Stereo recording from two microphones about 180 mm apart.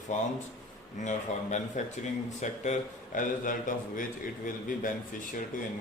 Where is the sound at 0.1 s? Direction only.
45° left (ahead or behind).